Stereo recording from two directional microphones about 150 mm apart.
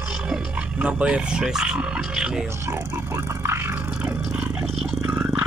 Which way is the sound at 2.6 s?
15° right (ahead or behind).